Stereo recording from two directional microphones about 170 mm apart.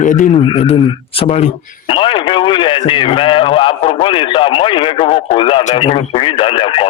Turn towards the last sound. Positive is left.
turn(degrees=30)  # may be behind; listen again after turning